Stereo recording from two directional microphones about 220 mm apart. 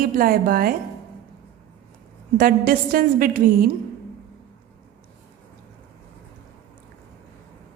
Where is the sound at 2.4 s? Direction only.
40° right (ahead or behind).